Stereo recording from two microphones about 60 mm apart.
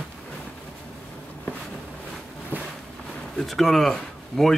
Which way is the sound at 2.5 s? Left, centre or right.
Right.